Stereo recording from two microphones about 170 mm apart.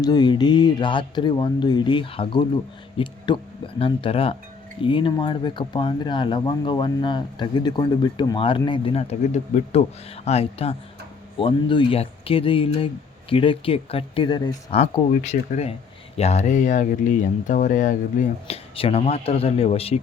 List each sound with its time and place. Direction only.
0.0 s speech: 25° left (ahead or behind)